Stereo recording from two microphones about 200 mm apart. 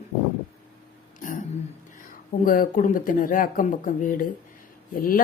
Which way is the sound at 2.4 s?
45° left (ahead or behind).